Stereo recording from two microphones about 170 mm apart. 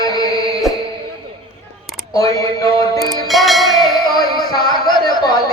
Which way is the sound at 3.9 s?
25° left (ahead or behind).